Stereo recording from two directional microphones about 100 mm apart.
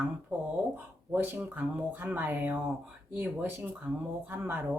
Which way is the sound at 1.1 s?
20° right (ahead or behind).